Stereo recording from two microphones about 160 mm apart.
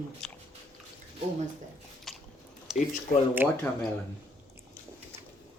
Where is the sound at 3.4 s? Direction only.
10° right (ahead or behind).